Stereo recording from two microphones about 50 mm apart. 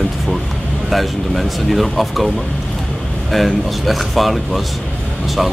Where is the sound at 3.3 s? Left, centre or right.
Centre.